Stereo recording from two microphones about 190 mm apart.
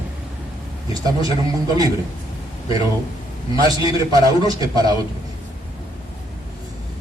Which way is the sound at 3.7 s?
20° right (ahead or behind).